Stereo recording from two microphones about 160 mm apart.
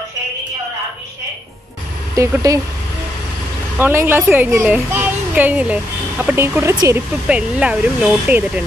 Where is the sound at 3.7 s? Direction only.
10° right (ahead or behind).